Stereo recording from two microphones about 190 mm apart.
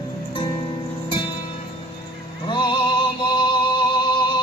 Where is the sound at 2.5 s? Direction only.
25° left (ahead or behind).